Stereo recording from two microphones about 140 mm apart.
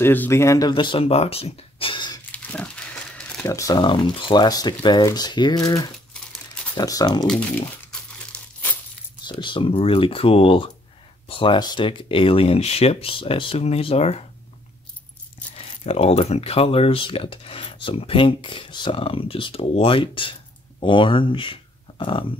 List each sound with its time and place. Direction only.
0.0 s speech: 15° left (ahead or behind); by 2.1 s 35° left (ahead or behind)
2.3 s pig: 10° left (ahead or behind)
3.4 s speech: 25° left (ahead or behind)
9.2 s speech: 35° left (ahead or behind)
15.5 s speech: 45° left (ahead or behind)